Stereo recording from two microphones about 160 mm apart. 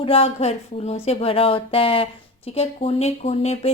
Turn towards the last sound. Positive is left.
turn(degrees=40)  # may be behind; listen again after turning